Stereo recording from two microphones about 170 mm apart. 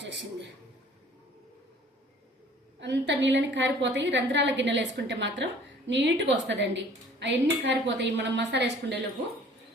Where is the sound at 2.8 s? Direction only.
90° right.